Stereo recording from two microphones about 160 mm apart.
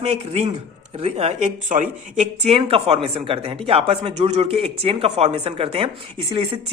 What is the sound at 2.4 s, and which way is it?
Speech, 35° right (ahead or behind).